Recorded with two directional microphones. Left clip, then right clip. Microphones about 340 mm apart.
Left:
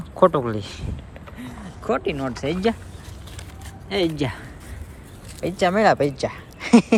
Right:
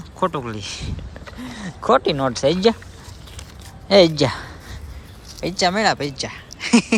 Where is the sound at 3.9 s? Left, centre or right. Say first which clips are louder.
Right 10 dB; centre.